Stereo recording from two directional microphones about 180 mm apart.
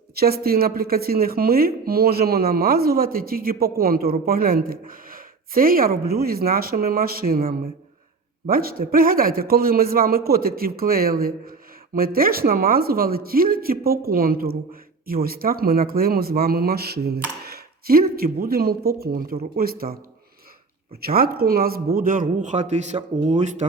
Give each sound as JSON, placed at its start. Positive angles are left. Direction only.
{"t": 0.2, "sound": "a woman's voice", "side_deg": -60}
{"t": 21.0, "sound": "a woman's voice", "side_deg": -55}